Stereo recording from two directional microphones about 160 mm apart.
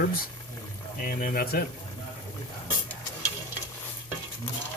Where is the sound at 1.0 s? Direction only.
70° left (ahead or behind).